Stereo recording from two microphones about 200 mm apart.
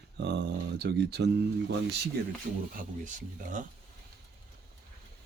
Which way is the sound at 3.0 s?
40° right (ahead or behind).